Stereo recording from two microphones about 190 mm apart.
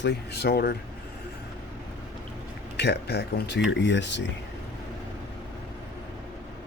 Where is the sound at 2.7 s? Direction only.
60° left (ahead or behind).